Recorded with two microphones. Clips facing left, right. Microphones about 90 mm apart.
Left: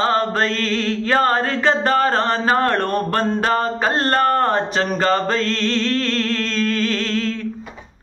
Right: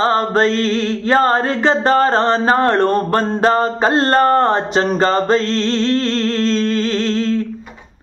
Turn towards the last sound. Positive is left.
turn(degrees=-30)  # may be behind; listen again after turning